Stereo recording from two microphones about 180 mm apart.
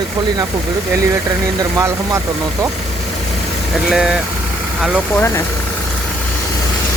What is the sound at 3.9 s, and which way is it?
Speech, 5° right (ahead or behind).